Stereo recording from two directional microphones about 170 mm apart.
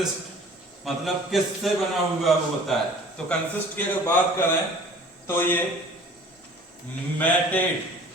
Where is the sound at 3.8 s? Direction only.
10° left (ahead or behind).